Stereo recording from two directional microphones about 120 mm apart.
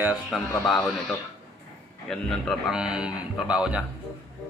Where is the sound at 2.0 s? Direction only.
Centre (ahead or behind).